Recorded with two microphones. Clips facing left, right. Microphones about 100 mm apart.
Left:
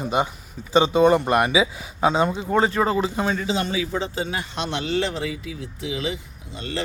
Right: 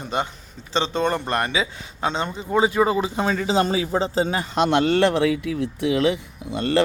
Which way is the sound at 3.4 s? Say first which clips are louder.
Right 4 dB; 35° right (ahead or behind).